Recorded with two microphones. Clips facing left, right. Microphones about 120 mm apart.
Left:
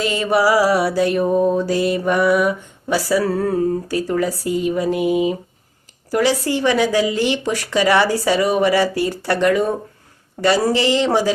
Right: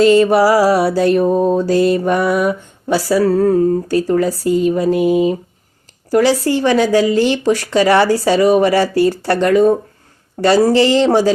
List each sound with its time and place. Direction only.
0.0 s mantra: 35° right (ahead or behind)